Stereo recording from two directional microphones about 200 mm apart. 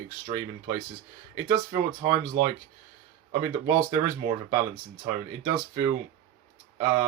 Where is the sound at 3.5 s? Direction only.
15° right (ahead or behind).